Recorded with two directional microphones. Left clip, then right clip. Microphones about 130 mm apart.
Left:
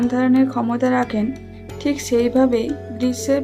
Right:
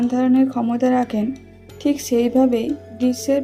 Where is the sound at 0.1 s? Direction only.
20° right (ahead or behind).